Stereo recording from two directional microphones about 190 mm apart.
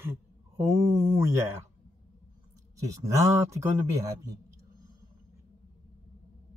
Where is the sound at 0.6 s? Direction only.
15° right (ahead or behind).